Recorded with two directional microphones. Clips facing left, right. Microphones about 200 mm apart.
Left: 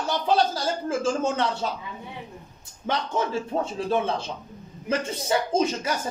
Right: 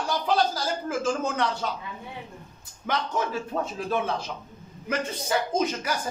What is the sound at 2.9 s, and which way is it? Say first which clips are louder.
Speech: left 2 dB; 25° left (ahead or behind).